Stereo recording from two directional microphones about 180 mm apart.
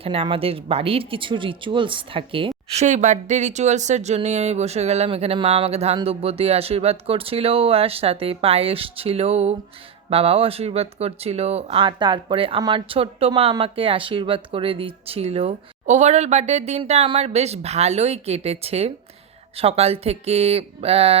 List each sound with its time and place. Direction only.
0.0 s speech: 30° right (ahead or behind)
2.8 s speech: 40° right (ahead or behind)